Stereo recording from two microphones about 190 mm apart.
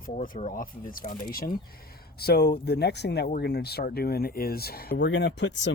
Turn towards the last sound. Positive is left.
turn(degrees=70)  # may be behind; listen again after turning